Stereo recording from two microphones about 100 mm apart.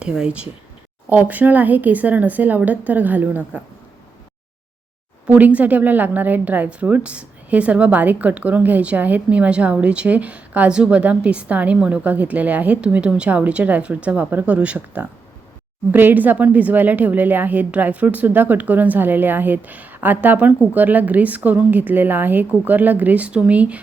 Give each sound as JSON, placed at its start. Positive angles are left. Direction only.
{"t": 0.0, "sound": "a woman's voice", "side_deg": -10}
{"t": 5.2, "sound": "a woman's voice", "side_deg": -15}